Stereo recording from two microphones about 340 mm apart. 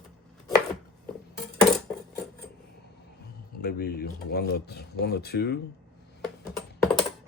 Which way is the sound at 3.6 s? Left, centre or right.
Left.